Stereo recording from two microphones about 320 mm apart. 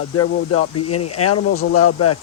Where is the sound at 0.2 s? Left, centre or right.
Left.